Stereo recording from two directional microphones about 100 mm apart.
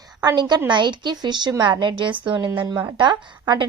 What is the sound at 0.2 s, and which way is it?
A woman's voice, 45° right (ahead or behind).